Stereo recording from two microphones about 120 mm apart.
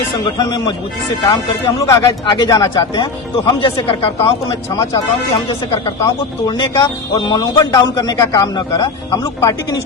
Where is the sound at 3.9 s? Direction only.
50° left (ahead or behind).